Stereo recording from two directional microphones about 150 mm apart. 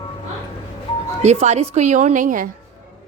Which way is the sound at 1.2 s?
50° right (ahead or behind).